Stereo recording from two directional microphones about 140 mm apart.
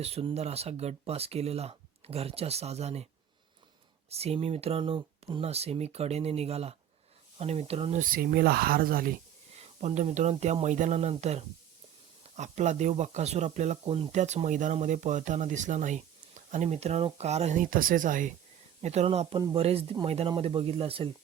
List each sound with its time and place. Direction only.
0.0 s speech: 45° right (ahead or behind)
4.1 s speech: 45° right (ahead or behind)
7.9 s speech: 85° right
9.8 s speech: 55° right (ahead or behind)
14.1 s speech: 55° right (ahead or behind); by 18.3 s 70° right (ahead or behind)
18.8 s speech: 50° right (ahead or behind)